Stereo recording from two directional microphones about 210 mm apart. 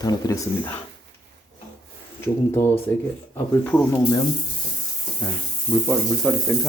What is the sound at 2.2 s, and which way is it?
Speech, 10° left (ahead or behind).